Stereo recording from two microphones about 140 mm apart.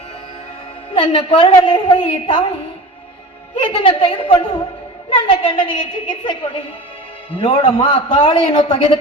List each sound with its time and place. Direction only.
0.9 s a woman's voice: 40° left (ahead or behind)
3.5 s a woman's voice: 40° left (ahead or behind)